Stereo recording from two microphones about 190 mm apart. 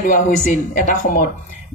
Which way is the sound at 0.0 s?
45° left (ahead or behind).